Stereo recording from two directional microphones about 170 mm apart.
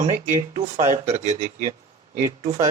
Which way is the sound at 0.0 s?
40° right (ahead or behind).